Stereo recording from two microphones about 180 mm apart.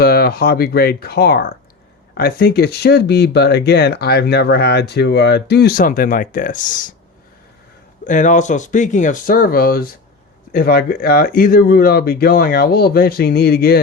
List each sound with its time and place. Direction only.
0.0 s speech: 60° left (ahead or behind)
8.0 s speech: 45° left (ahead or behind)